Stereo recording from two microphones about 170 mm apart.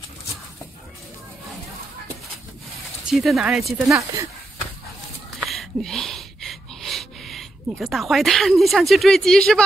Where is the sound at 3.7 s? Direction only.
15° right (ahead or behind).